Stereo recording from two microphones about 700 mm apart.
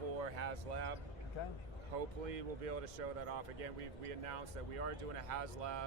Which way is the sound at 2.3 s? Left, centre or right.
Right.